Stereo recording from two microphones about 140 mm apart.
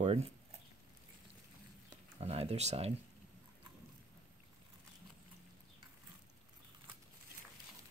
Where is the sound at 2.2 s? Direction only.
50° right (ahead or behind).